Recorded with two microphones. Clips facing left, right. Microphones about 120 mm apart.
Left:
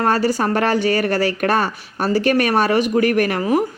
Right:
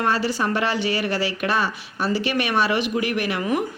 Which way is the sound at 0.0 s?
45° left (ahead or behind).